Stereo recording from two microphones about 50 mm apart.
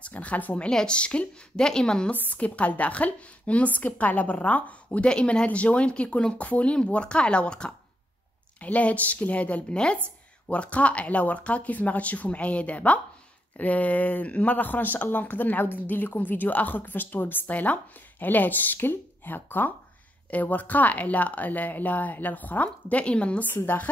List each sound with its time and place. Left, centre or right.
0.0 s speech: left
0.6 s a woman's voice: centre
2.3 s speech: left
5.1 s speech: centre
8.5 s speech: left
23.4 s a woman's voice: left